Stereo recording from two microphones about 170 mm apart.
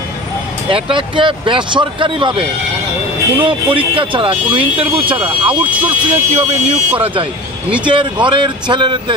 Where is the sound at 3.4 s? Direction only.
30° right (ahead or behind).